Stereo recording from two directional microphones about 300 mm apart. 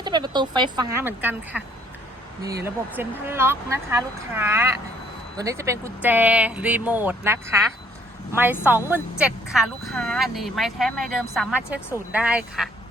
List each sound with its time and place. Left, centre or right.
0.0 s speech: centre
2.6 s speech: centre